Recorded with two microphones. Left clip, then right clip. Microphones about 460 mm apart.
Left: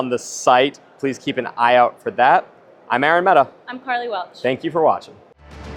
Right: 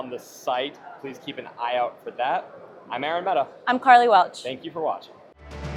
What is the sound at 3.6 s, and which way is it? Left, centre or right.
Speech, right.